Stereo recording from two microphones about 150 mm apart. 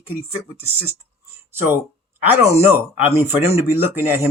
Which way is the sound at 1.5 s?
15° right (ahead or behind).